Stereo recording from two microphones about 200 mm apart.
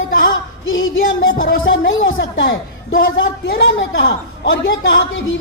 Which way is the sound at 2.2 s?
60° left (ahead or behind).